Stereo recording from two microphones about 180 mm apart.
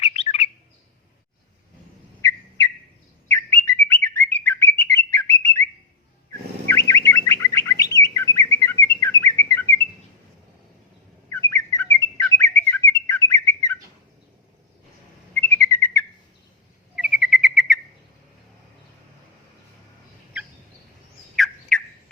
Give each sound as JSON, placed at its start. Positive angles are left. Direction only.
{"t": 0.0, "sound": "bird", "side_deg": 35}
{"t": 3.2, "sound": "bird", "side_deg": 15}
{"t": 4.0, "sound": "chirp", "side_deg": 10}
{"t": 6.7, "sound": "bird", "side_deg": 15}
{"t": 11.3, "sound": "bird", "side_deg": 15}
{"t": 15.3, "sound": "bird", "side_deg": 15}
{"t": 16.9, "sound": "bird", "side_deg": -5}
{"t": 21.3, "sound": "squawk", "side_deg": 0}